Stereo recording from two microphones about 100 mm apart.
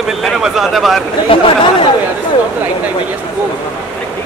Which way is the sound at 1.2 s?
65° left (ahead or behind).